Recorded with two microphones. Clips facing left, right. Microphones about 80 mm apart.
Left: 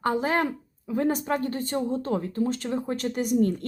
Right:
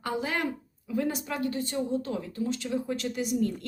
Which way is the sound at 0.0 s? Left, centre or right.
Left.